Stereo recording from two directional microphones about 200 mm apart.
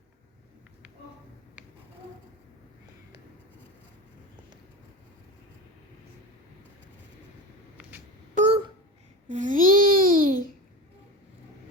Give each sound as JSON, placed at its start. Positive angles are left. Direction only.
{"t": 7.8, "sound": "telephone dialing", "side_deg": -10}
{"t": 8.4, "sound": "a sound", "side_deg": -35}
{"t": 9.3, "sound": "babbling", "side_deg": -40}